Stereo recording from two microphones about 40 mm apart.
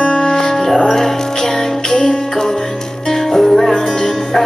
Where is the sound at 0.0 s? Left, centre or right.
Left.